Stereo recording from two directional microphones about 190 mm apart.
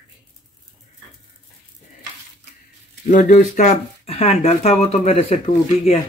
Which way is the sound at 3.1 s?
45° left (ahead or behind).